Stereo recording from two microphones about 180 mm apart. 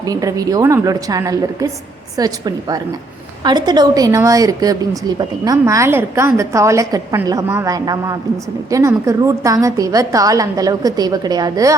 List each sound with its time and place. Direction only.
0.0 s a woman's voice: 20° right (ahead or behind)